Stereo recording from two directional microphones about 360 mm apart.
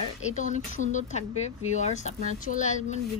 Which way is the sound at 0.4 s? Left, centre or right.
Centre.